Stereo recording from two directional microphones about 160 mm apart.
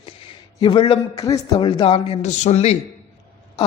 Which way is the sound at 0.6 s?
30° left (ahead or behind).